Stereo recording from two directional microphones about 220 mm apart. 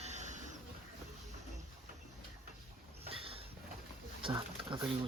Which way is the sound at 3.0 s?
25° right (ahead or behind).